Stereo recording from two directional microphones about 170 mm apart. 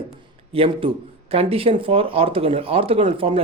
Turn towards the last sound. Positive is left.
turn(degrees=-35)  # may be behind; listen again after turning